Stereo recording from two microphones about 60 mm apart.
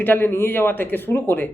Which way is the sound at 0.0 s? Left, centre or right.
Left.